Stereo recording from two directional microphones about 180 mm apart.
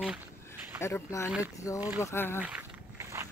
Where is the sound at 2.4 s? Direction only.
10° right (ahead or behind).